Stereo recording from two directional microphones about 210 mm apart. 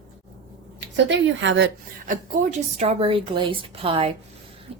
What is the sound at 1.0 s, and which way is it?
Speech, 60° right (ahead or behind).